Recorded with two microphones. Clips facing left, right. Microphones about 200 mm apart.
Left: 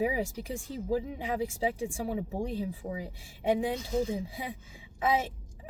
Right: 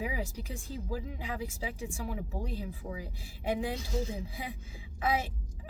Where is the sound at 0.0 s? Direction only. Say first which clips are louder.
Left 7 dB; 25° left (ahead or behind).